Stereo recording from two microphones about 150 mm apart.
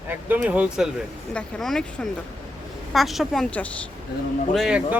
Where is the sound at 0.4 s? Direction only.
10° right (ahead or behind).